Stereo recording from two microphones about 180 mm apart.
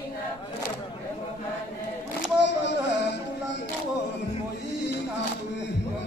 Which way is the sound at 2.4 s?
75° left (ahead or behind).